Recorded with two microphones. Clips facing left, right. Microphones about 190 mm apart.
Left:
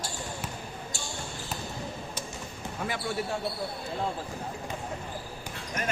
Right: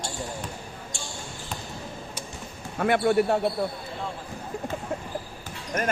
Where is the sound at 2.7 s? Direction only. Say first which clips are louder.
Right 11 dB; 60° right (ahead or behind).